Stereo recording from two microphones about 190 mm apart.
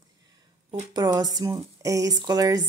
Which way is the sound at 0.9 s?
20° right (ahead or behind).